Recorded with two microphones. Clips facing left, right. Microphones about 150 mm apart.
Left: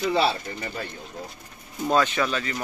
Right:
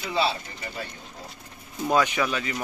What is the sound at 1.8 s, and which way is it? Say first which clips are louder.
Speech: left 1 dB; 10° right (ahead or behind).